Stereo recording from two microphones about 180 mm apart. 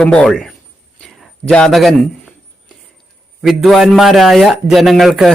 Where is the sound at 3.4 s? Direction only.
Centre (ahead or behind).